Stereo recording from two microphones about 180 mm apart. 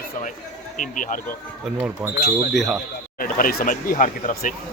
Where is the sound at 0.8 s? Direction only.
45° left (ahead or behind).